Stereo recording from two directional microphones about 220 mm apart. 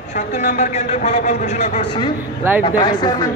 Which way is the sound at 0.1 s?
35° left (ahead or behind).